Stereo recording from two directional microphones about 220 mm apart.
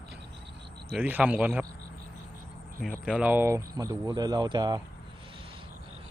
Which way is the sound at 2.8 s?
5° right (ahead or behind).